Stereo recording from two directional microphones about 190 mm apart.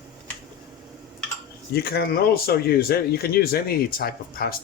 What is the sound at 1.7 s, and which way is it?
Speech, 55° left (ahead or behind).